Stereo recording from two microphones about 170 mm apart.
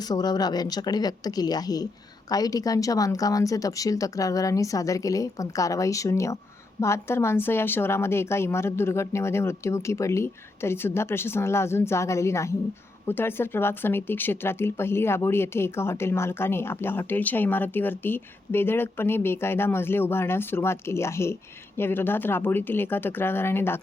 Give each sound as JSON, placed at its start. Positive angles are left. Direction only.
{"t": 0.0, "sound": "speech", "side_deg": 25}